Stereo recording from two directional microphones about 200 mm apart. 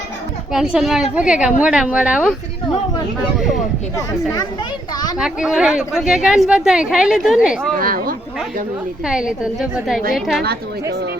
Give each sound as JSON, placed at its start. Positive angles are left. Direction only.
{"t": 0.5, "sound": "a woman's voice", "side_deg": 0}
{"t": 3.9, "sound": "speech", "side_deg": 15}
{"t": 5.1, "sound": "a woman's voice", "side_deg": -5}
{"t": 7.8, "sound": "speech", "side_deg": -45}
{"t": 9.0, "sound": "a woman's voice", "side_deg": -5}